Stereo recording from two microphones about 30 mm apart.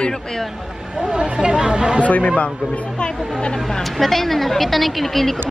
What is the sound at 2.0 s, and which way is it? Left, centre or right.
Speech, left.